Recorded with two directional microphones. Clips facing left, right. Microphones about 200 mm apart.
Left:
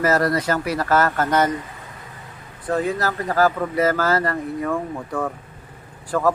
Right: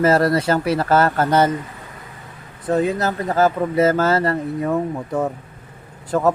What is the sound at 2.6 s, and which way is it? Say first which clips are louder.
Speech: right 3 dB; 20° right (ahead or behind).